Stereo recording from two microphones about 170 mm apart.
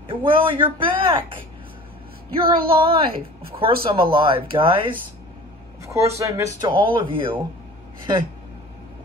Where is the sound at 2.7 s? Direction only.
35° right (ahead or behind).